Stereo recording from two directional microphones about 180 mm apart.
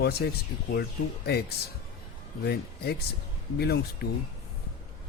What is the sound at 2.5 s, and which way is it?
Speech, 65° left (ahead or behind).